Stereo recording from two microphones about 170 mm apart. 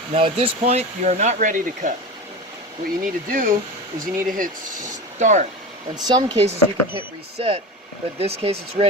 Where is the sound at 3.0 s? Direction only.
55° right (ahead or behind).